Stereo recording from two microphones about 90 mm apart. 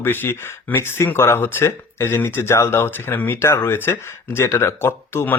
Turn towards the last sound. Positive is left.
turn(degrees=25)  # may be behind; listen again after turning